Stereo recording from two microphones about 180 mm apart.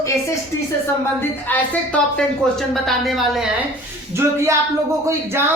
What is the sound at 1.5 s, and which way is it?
A woman's voice, 10° left (ahead or behind).